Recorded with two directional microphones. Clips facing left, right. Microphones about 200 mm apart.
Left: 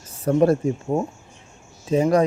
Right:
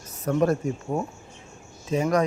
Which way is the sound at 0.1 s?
30° left (ahead or behind).